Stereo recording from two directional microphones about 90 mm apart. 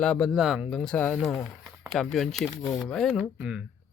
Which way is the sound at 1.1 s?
Centre (ahead or behind).